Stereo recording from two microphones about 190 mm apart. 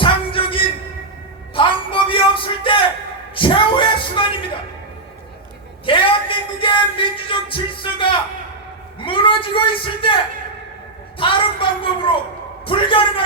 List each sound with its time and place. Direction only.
0.0 s music: 25° left (ahead or behind)
1.5 s a sound: 25° left (ahead or behind)
3.3 s music: 25° left (ahead or behind)
5.8 s music: 25° left (ahead or behind)
9.0 s a man's voice: 25° left (ahead or behind)
11.2 s a man's voice: 25° left (ahead or behind)